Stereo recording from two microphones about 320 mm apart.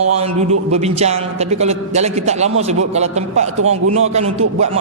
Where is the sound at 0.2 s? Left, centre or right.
Centre.